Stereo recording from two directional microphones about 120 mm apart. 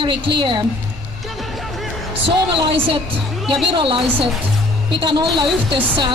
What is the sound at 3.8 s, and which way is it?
A woman's voice, 45° right (ahead or behind).